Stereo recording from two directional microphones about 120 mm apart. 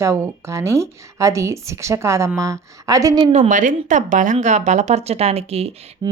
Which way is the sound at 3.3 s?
80° right.